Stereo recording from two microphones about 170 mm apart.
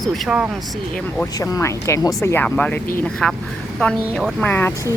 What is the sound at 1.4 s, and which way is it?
Speech, 15° left (ahead or behind).